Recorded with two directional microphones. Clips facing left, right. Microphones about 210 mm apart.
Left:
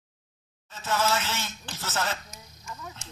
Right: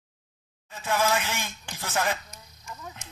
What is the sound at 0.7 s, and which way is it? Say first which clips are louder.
Speech: right 1 dB; 15° right (ahead or behind).